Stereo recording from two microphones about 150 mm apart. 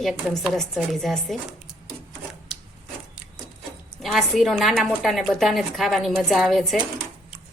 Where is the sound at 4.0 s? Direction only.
Centre (ahead or behind).